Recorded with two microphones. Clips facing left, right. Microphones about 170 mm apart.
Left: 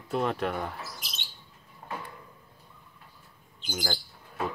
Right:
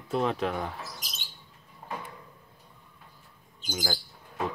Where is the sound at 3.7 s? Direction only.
Centre (ahead or behind).